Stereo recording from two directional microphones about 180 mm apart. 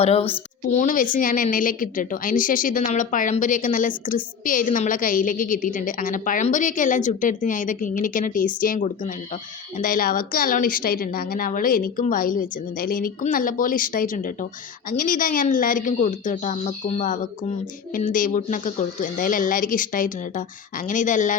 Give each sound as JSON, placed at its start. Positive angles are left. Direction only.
{"t": 0.0, "sound": "a woman's voice", "side_deg": 35}
{"t": 0.8, "sound": "a woman's voice", "side_deg": 45}